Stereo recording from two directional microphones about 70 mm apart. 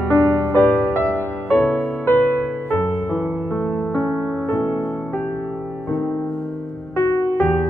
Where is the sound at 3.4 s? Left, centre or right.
Left.